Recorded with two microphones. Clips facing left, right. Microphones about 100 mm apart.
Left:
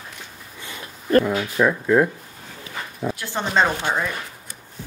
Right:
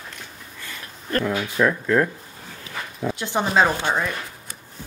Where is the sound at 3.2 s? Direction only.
15° right (ahead or behind).